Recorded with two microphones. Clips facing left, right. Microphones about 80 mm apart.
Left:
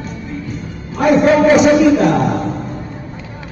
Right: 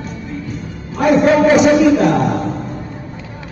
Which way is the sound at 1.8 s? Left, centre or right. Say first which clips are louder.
Even; left.